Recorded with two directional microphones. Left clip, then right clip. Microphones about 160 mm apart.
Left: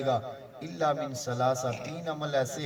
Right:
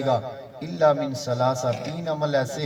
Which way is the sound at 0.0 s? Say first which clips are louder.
Right 5 dB; 30° left (ahead or behind).